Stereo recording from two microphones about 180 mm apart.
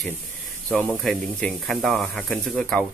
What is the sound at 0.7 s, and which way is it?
Speech, 5° left (ahead or behind).